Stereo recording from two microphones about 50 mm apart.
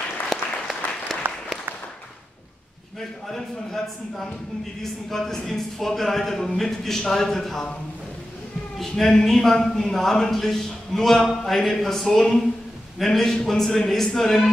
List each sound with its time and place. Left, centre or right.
0.3 s applause: centre
3.0 s a man's voice: centre
8.7 s a man's voice: centre